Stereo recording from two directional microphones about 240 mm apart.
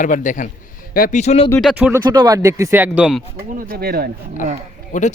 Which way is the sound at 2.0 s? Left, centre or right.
Centre.